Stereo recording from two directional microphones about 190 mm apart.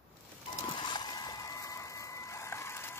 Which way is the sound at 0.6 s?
25° left (ahead or behind).